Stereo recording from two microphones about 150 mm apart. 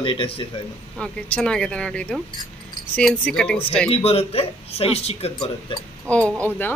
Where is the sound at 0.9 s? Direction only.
5° left (ahead or behind).